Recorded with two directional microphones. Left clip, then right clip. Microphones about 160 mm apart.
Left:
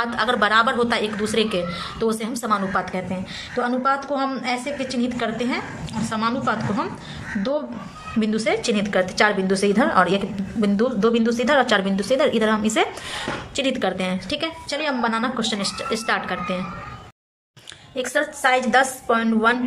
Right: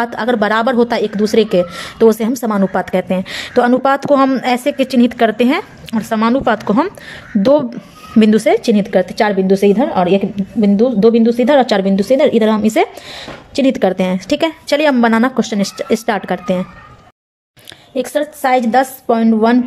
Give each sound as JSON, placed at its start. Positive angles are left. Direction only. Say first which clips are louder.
{"t": 0.0, "sound": "speech", "louder": "right 5 dB", "side_deg": -45}
{"t": 8.2, "sound": "speech", "louder": "right 13 dB", "side_deg": -50}
{"t": 8.5, "sound": "a woman's voice", "louder": "right 9 dB", "side_deg": -35}
{"t": 15.3, "sound": "a woman's voice", "louder": "right 7 dB", "side_deg": -40}
{"t": 17.9, "sound": "a woman's voice", "louder": "right 6 dB", "side_deg": -30}